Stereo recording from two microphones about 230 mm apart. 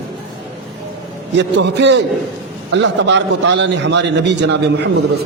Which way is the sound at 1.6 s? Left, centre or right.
Right.